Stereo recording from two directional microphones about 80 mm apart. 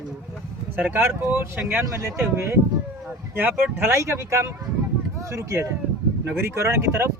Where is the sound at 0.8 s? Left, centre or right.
Right.